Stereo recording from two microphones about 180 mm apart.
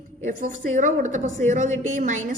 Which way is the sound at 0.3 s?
45° right (ahead or behind).